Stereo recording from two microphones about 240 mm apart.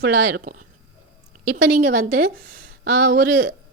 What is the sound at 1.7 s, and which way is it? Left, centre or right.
A woman's voice, right.